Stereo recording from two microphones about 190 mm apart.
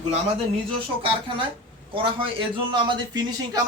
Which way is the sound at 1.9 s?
25° right (ahead or behind).